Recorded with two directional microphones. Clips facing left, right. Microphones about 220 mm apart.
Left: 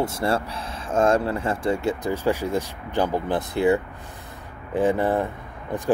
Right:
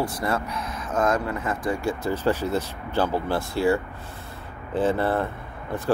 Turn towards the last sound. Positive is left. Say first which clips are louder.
# left 1 dB
turn(degrees=15)  # may be behind; listen again after turning